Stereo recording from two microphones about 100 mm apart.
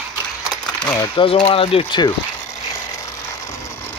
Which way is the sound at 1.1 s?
65° left (ahead or behind).